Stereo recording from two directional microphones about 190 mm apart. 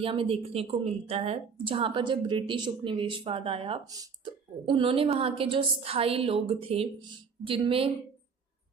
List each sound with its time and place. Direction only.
0.0 s speech: 30° right (ahead or behind)